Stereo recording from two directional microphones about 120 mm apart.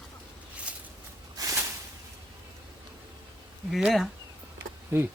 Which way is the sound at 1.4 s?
30° right (ahead or behind).